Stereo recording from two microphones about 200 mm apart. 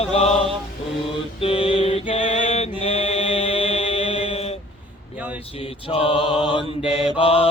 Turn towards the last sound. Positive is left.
turn(degrees=30)  # may be behind; listen again after turning